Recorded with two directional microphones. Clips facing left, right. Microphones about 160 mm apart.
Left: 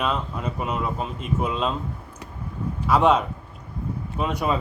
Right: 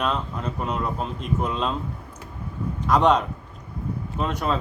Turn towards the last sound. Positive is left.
turn(degrees=10)  # may be behind; listen again after turning